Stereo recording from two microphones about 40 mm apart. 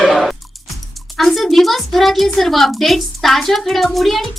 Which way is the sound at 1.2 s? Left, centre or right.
Centre.